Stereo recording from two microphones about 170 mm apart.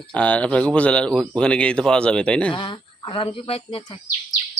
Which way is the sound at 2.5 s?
30° left (ahead or behind).